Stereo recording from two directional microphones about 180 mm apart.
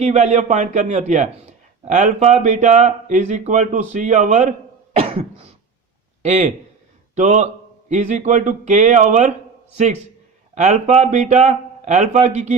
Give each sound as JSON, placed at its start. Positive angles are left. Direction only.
{"t": 0.0, "sound": "a man's voice", "side_deg": -40}
{"t": 10.5, "sound": "a man's voice", "side_deg": -40}